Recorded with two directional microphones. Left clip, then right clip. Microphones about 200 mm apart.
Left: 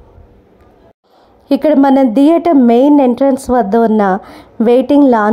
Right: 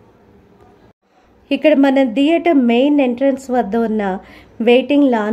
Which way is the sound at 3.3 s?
25° left (ahead or behind).